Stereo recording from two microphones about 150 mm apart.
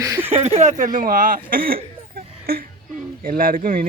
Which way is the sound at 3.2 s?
70° right (ahead or behind).